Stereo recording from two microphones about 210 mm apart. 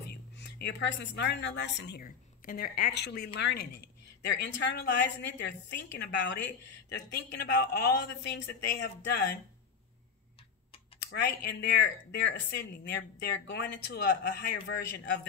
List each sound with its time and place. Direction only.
0.0 s a woman's voice: 50° left (ahead or behind)
11.1 s speech: 50° left (ahead or behind)